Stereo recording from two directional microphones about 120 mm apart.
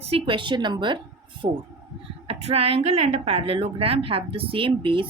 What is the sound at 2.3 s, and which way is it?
Speech, 55° right (ahead or behind).